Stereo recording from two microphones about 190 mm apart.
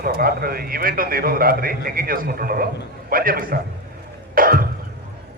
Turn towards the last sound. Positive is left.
turn(degrees=-50)  # may be behind; listen again after turning